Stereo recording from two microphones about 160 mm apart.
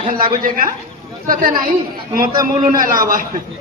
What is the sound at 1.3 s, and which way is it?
Speech, 60° right (ahead or behind).